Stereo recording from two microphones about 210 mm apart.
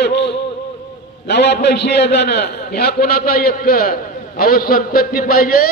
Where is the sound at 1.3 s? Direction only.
55° left (ahead or behind).